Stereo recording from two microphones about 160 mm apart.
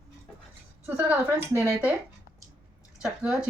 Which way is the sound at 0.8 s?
10° right (ahead or behind).